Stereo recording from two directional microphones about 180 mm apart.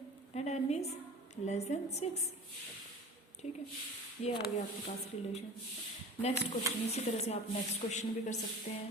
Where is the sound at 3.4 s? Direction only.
40° left (ahead or behind).